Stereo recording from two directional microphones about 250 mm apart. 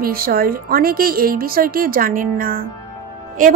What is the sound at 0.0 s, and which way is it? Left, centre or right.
Speech, right.